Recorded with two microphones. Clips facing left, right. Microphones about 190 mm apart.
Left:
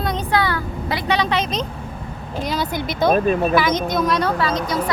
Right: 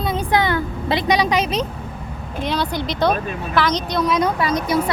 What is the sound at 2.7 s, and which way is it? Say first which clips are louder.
Speech: left 5 dB; 50° left (ahead or behind).